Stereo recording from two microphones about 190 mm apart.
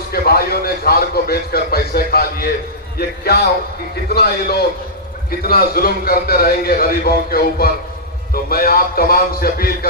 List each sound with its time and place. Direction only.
0.1 s a man's voice: 55° left (ahead or behind)